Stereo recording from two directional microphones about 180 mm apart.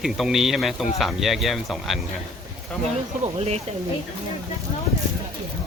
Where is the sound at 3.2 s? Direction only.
35° right (ahead or behind).